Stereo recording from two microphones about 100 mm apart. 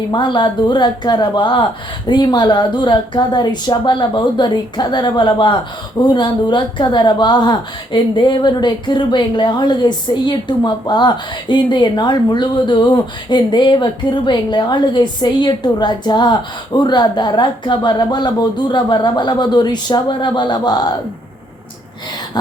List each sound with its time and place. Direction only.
0.1 s speech: 50° left (ahead or behind)